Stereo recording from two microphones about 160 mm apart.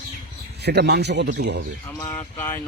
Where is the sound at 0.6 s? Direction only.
90° right.